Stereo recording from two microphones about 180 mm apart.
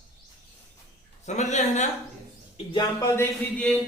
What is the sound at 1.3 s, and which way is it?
Speech, 40° left (ahead or behind).